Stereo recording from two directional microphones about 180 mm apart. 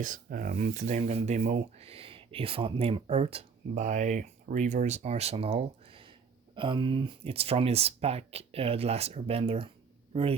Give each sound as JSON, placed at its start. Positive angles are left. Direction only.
{"t": 0.0, "sound": "a man's voice", "side_deg": -50}